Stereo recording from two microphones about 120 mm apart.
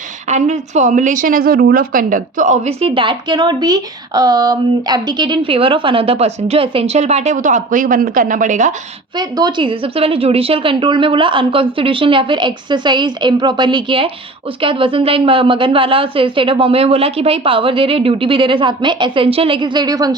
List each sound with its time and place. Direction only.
0.3 s a woman's voice: 75° right (ahead or behind); by 2.7 s 90° right
2.8 s a woman's voice: 45° right (ahead or behind); by 8.7 s 90° right
9.1 s a woman's voice: 40° right (ahead or behind)